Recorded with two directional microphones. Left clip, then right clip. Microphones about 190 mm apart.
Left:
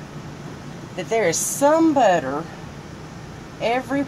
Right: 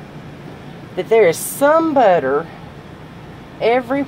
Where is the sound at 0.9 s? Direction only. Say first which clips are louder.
Right 8 dB; 45° right (ahead or behind).